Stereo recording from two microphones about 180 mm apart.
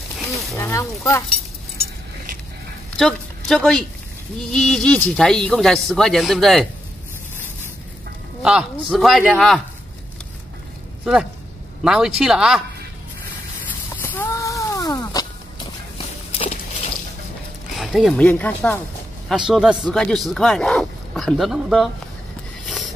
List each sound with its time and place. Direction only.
0.6 s speech: 15° left (ahead or behind)
3.0 s speech: centre (ahead or behind)
8.4 s speech: 5° right (ahead or behind)
11.8 s speech: 5° right (ahead or behind)
14.0 s a sound: 10° left (ahead or behind)
16.3 s walk: 35° left (ahead or behind)
17.7 s speech: centre (ahead or behind)
19.2 s speech: centre (ahead or behind)